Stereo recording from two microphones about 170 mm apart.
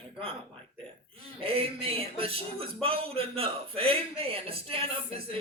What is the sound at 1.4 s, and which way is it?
Speech, 35° right (ahead or behind).